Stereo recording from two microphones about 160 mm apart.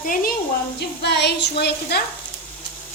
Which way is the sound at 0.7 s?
90° left.